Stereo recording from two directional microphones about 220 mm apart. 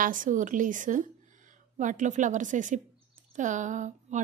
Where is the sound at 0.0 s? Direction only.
35° right (ahead or behind).